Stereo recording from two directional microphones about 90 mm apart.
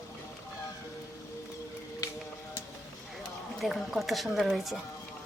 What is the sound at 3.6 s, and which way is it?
Speech, centre (ahead or behind).